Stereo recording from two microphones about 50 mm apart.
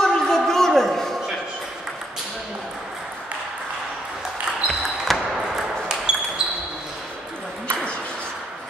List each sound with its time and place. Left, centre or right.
0.0 s a sound: centre
4.6 s basketball bounce: centre
5.9 s basketball bounce: centre